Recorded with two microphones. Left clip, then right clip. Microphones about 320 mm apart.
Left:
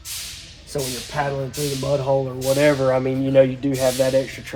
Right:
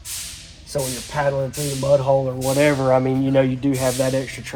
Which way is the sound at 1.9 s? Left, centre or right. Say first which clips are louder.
Right 5 dB; centre.